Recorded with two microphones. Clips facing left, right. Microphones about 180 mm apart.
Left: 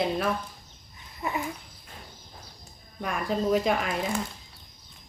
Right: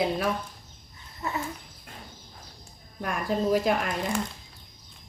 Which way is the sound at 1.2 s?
15° left (ahead or behind).